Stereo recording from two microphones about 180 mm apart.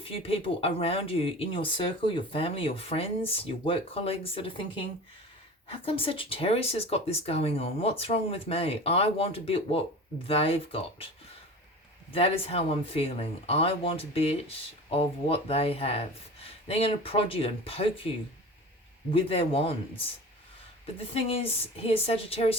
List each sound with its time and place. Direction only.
0.0 s speech: 30° left (ahead or behind)
12.1 s speech: 35° left (ahead or behind)
19.1 s speech: 30° left (ahead or behind)
21.1 s speech: 30° left (ahead or behind)